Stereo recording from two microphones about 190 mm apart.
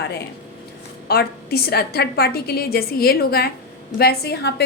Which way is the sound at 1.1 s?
55° left (ahead or behind).